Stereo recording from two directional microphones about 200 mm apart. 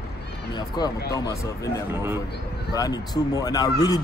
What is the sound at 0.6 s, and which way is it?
Speech, 20° left (ahead or behind).